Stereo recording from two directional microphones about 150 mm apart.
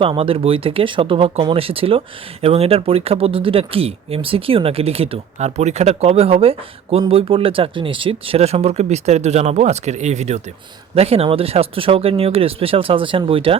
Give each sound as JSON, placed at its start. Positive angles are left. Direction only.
{"t": 0.0, "sound": "speech", "side_deg": -40}